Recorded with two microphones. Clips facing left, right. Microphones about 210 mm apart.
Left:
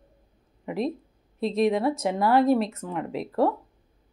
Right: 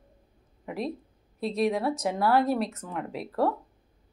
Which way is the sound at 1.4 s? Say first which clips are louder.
Left 4 dB; 10° right (ahead or behind).